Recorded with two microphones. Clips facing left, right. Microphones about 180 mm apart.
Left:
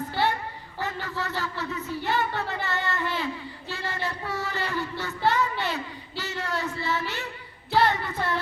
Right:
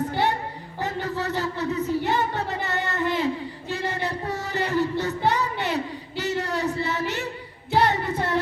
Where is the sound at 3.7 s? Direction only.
20° right (ahead or behind).